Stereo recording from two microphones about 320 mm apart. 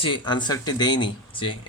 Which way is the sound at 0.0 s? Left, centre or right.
Centre.